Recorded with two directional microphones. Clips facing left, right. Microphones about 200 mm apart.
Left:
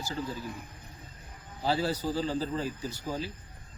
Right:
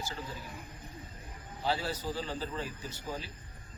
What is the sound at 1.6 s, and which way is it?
Speech, 35° left (ahead or behind).